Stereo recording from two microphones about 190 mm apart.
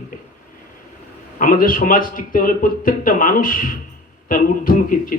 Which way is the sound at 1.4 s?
45° left (ahead or behind).